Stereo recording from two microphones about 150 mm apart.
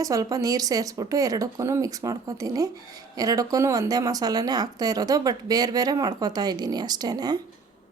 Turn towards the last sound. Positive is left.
turn(degrees=-25)  # may be behind; listen again after turning